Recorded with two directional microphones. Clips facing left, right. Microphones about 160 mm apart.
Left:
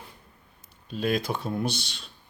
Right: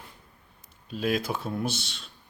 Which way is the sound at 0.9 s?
5° right (ahead or behind).